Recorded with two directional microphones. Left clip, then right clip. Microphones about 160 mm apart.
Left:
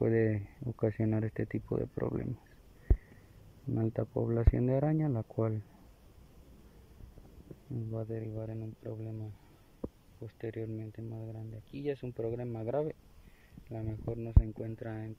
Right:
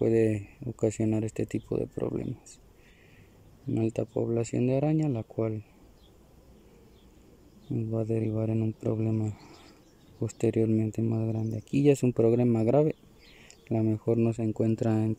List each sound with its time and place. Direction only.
0.0 s speech: 20° right (ahead or behind)
3.7 s speech: 20° right (ahead or behind)
7.7 s speech: 15° right (ahead or behind)